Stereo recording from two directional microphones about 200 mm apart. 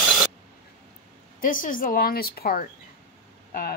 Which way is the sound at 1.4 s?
45° left (ahead or behind).